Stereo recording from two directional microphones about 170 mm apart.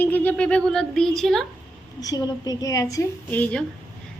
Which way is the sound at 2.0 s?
20° left (ahead or behind).